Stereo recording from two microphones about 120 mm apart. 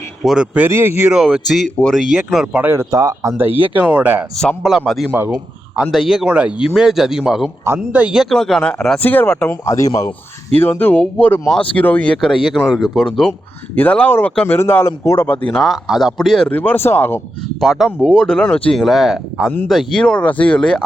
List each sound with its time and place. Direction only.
0.2 s speech: 5° right (ahead or behind)
0.7 s speech: 20° right (ahead or behind)
1.1 s speech: centre (ahead or behind)
2.9 s speech: 30° right (ahead or behind)
3.3 s speech: 15° right (ahead or behind)
4.4 s speech: centre (ahead or behind)
5.2 s speech: 20° right (ahead or behind)
5.7 s speech: 5° right (ahead or behind)
9.0 s speech: 15° left (ahead or behind)
9.5 s a man's voice: 25° left (ahead or behind)
10.5 s a man's voice: 15° left (ahead or behind)
15.4 s speech: centre (ahead or behind)
16.5 s speech: 15° left (ahead or behind)
17.6 s speech: centre (ahead or behind)